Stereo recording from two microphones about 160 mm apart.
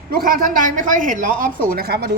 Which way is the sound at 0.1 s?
65° right (ahead or behind).